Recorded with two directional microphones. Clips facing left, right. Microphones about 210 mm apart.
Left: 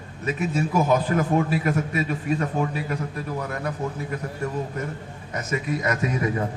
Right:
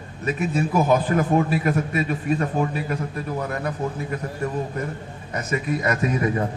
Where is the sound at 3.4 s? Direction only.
30° right (ahead or behind).